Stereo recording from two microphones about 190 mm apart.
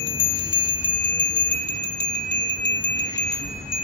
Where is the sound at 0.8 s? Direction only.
70° left (ahead or behind).